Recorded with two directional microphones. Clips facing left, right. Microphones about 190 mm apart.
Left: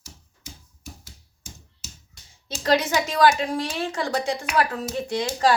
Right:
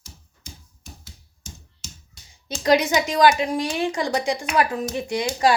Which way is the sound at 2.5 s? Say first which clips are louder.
Right 3 dB; 15° right (ahead or behind).